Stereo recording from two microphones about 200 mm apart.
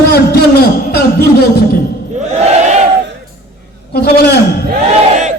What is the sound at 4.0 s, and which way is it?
Speech, 55° left (ahead or behind).